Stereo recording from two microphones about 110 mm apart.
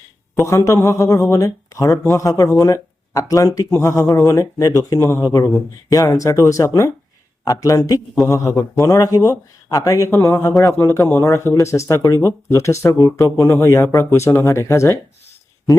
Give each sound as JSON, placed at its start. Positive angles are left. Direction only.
{"t": 0.4, "sound": "speech", "side_deg": 30}